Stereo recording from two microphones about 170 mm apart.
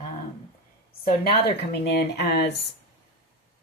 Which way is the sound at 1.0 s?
70° left (ahead or behind).